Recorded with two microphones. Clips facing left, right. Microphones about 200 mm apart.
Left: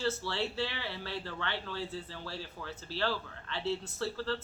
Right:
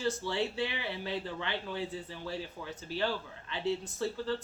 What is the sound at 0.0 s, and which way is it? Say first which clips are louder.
Speech: right 2 dB; 15° right (ahead or behind).